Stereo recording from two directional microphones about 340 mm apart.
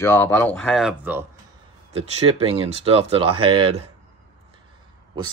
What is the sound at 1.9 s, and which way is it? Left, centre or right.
Speech, centre.